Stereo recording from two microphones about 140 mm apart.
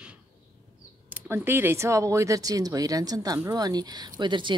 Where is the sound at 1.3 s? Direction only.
15° right (ahead or behind).